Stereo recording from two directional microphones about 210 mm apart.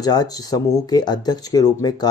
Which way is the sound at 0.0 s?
20° left (ahead or behind).